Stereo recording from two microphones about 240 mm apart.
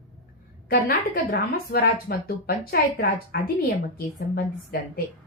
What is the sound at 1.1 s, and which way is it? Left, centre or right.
Speech, left.